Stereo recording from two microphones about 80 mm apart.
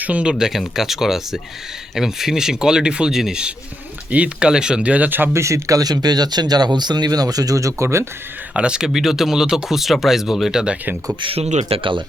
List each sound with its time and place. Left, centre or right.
0.0 s speech: centre
5.3 s speech: right
8.5 s speech: centre
11.8 s speech: right